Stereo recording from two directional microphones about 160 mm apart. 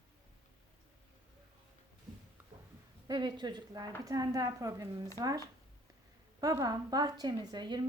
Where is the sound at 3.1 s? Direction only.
25° right (ahead or behind).